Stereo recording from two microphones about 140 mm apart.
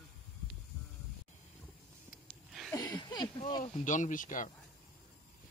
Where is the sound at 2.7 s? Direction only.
30° left (ahead or behind).